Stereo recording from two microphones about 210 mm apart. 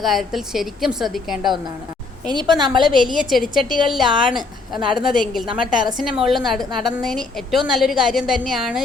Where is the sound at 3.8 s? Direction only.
Centre (ahead or behind).